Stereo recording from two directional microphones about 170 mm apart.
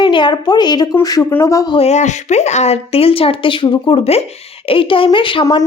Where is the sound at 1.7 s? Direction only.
40° left (ahead or behind).